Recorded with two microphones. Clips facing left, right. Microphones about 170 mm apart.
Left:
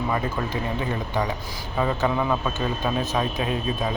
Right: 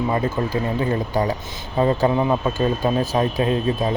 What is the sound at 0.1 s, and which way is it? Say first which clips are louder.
A man's voice: right 5 dB; 35° right (ahead or behind).